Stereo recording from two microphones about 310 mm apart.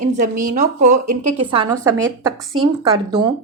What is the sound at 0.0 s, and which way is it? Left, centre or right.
A woman's voice, right.